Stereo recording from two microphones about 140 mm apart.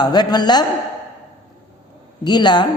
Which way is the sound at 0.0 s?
30° left (ahead or behind).